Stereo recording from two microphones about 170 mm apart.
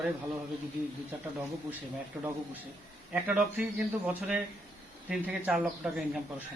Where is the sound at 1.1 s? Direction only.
10° right (ahead or behind).